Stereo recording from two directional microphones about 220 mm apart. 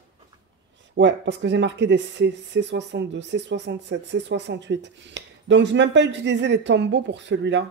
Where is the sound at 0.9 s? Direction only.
55° right (ahead or behind).